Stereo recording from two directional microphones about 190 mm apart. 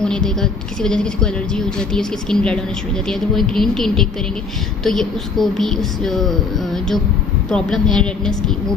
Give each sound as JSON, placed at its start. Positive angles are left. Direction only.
{"t": 0.0, "sound": "a woman's voice", "side_deg": 5}